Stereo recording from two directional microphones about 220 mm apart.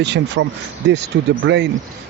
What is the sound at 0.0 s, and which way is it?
Speech, 55° right (ahead or behind).